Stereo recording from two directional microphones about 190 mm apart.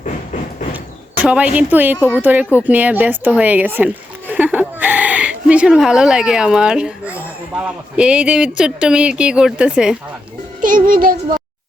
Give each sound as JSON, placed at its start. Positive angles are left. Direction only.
{"t": 0.7, "sound": "a sound", "side_deg": -10}
{"t": 2.0, "sound": "speech", "side_deg": 5}
{"t": 2.2, "sound": "a woman's voice", "side_deg": -10}
{"t": 10.6, "sound": "speech", "side_deg": -45}